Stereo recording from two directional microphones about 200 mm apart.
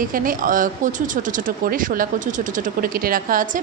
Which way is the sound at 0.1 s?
45° right (ahead or behind).